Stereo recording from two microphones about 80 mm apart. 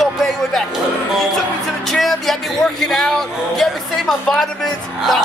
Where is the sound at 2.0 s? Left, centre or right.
Centre.